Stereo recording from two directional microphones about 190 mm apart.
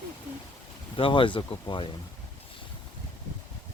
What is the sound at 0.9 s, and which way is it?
Speech, 25° left (ahead or behind).